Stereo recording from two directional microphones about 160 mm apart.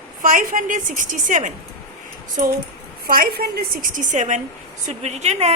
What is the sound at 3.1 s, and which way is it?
A woman's voice, 70° right (ahead or behind).